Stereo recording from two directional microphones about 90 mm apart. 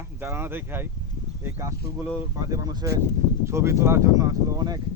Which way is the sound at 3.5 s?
30° right (ahead or behind).